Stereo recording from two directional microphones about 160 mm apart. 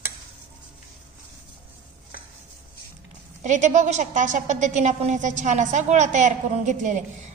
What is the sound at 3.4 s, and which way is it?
A woman's voice, 50° right (ahead or behind).